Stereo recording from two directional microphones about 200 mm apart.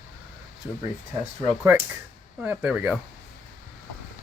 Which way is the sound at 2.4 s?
5° right (ahead or behind).